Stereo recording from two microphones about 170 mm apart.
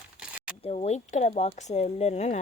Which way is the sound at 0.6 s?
40° left (ahead or behind).